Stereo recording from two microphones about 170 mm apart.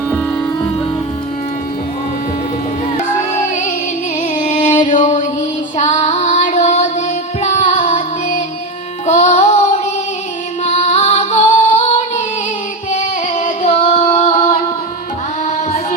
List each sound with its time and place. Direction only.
3.3 s music: 45° left (ahead or behind)
5.7 s female singing: 40° left (ahead or behind)
7.4 s music: 40° left (ahead or behind)
9.0 s female singing: 40° left (ahead or behind)
10.6 s music: 40° left (ahead or behind)